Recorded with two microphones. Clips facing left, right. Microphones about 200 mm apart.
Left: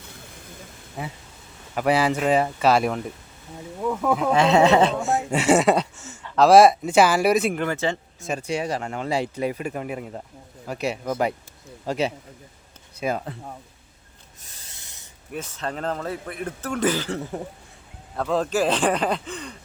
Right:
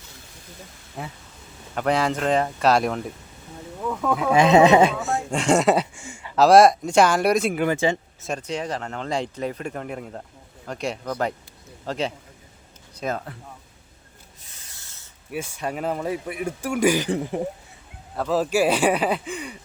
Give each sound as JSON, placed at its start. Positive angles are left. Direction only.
{"t": 1.0, "sound": "speech", "side_deg": 0}
{"t": 4.2, "sound": "a man's voice", "side_deg": -10}
{"t": 5.0, "sound": "speech", "side_deg": 5}
{"t": 7.6, "sound": "a man's voice", "side_deg": -15}
{"t": 8.2, "sound": "speech", "side_deg": 5}
{"t": 14.7, "sound": "snake", "side_deg": 20}
{"t": 15.3, "sound": "a man's voice", "side_deg": -10}